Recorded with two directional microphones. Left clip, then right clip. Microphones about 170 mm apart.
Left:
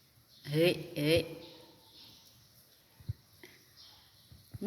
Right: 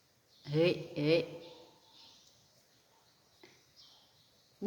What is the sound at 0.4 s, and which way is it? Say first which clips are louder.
Speech: left 1 dB; 10° right (ahead or behind).